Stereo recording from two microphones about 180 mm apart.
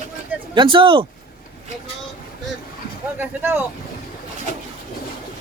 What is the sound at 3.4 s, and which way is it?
Speech, 10° right (ahead or behind).